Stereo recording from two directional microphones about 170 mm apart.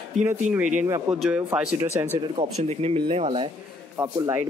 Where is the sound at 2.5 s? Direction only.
40° right (ahead or behind).